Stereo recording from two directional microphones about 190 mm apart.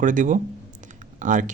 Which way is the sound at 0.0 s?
45° right (ahead or behind).